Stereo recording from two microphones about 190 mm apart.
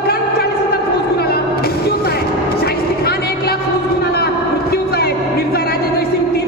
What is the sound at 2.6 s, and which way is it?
Vehicle, 55° left (ahead or behind).